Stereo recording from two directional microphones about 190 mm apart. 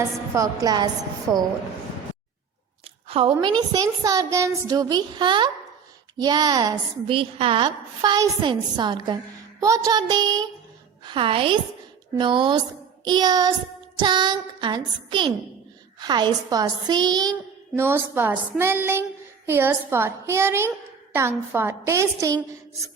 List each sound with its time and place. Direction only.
0.3 s a woman's voice: 20° right (ahead or behind)
2.8 s a sound: 30° right (ahead or behind)
3.4 s a woman's voice: 20° right (ahead or behind)